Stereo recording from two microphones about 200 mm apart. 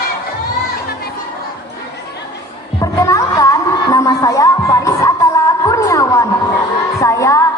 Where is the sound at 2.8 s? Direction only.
15° left (ahead or behind).